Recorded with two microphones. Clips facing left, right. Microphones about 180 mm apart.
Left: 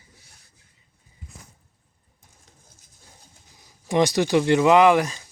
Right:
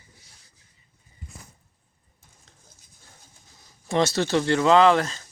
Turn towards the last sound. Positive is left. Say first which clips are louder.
# left 1 dB
turn(degrees=15)  # may be behind; listen again after turning